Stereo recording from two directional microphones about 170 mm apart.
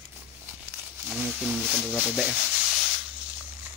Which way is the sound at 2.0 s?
5° right (ahead or behind).